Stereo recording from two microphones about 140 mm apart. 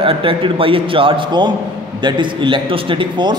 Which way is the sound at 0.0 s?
40° right (ahead or behind).